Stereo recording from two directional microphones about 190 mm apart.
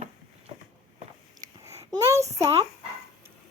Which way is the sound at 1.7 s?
15° right (ahead or behind).